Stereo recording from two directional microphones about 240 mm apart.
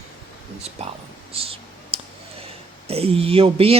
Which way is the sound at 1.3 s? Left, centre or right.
Right.